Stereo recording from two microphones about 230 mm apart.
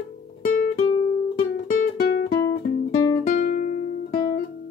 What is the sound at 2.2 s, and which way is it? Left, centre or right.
Guitar, centre.